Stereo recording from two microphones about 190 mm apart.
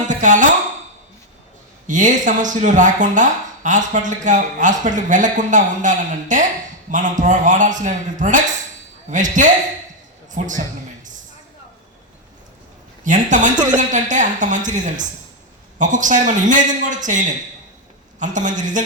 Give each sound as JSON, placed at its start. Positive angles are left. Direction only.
{"t": 0.0, "sound": "a sound", "side_deg": -40}
{"t": 1.9, "sound": "a man's voice", "side_deg": -40}
{"t": 13.1, "sound": "speech", "side_deg": -40}
{"t": 18.2, "sound": "speech", "side_deg": -40}